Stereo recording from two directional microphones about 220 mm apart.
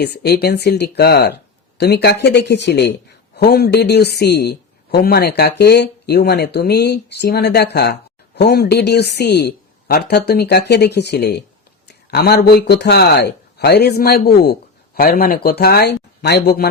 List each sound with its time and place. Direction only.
0.0 s speech: 50° left (ahead or behind)